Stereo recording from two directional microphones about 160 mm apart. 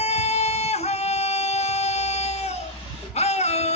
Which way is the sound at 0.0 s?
40° left (ahead or behind).